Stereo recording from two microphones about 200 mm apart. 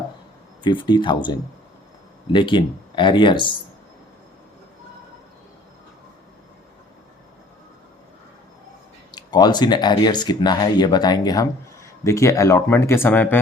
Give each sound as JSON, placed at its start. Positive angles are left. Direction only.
{"t": 0.6, "sound": "speech", "side_deg": 25}
{"t": 2.3, "sound": "speech", "side_deg": 25}
{"t": 9.1, "sound": "speech", "side_deg": 20}